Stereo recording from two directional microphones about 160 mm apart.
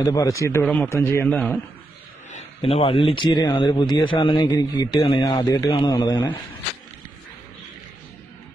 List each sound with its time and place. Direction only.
0.0 s a man's voice: 20° left (ahead or behind)
2.3 s a man's voice: 35° left (ahead or behind)